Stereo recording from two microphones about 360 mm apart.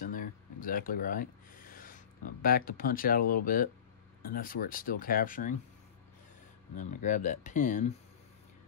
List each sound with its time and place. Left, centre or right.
0.0 s a sound: left
3.4 s speech: left
6.7 s speech: left